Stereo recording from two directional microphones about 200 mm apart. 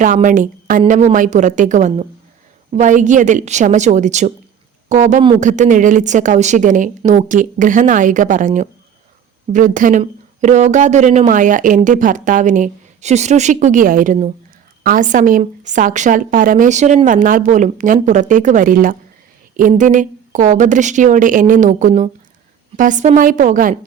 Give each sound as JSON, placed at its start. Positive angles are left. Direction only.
{"t": 0.0, "sound": "speech", "side_deg": -40}